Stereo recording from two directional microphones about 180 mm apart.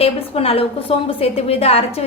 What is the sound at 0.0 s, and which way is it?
A woman's voice, 30° left (ahead or behind).